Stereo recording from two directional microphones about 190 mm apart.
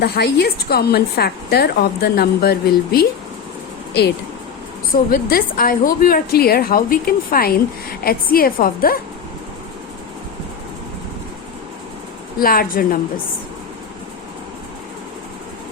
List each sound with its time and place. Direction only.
0.0 s a woman's voice: 55° left (ahead or behind)
5.1 s a woman's voice: 50° left (ahead or behind)
12.4 s a woman's voice: 50° left (ahead or behind)